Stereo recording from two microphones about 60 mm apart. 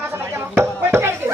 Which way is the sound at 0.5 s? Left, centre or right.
Right.